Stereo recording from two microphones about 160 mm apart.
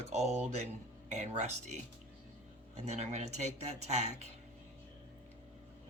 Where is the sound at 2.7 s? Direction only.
45° right (ahead or behind).